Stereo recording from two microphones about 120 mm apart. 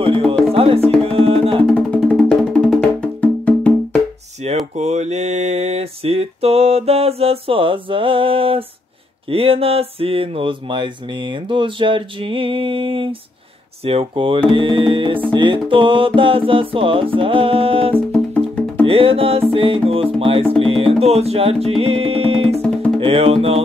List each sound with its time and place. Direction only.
0.0 s music: 50° right (ahead or behind)
1.7 s music: 10° left (ahead or behind)
4.4 s a sound: 60° right (ahead or behind)
4.7 s mantra: 70° right (ahead or behind); by 8.6 s 50° right (ahead or behind)
9.3 s speech: 50° right (ahead or behind)
20.6 s music: 50° right (ahead or behind)
22.9 s speech: 50° right (ahead or behind)